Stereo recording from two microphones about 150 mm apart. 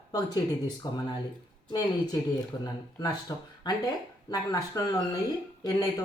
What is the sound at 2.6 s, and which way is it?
Speech, 25° left (ahead or behind).